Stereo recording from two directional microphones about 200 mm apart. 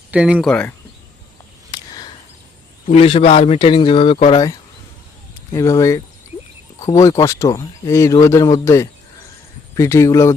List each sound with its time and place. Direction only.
0.1 s speech: 5° right (ahead or behind)
1.7 s a sound: 20° left (ahead or behind)
2.9 s speech: 30° left (ahead or behind)
5.5 s speech: 15° left (ahead or behind)